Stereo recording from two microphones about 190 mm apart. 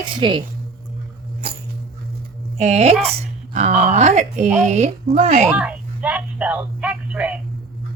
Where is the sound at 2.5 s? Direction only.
35° right (ahead or behind).